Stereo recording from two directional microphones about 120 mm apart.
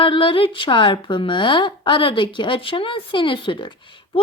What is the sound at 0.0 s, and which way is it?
A woman's voice, 45° left (ahead or behind).